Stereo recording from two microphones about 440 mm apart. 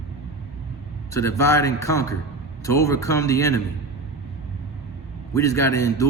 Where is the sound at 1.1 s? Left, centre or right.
Centre.